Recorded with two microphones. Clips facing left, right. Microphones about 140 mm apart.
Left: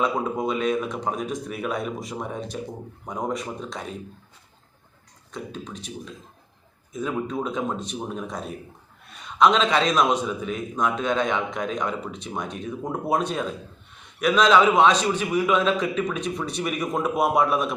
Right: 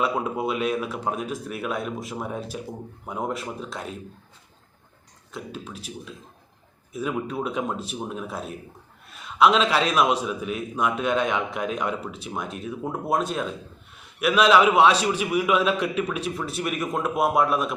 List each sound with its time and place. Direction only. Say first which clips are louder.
0.0 s speech: left 1 dB; 5° right (ahead or behind)
5.3 s a man's voice: left 1 dB; 5° right (ahead or behind)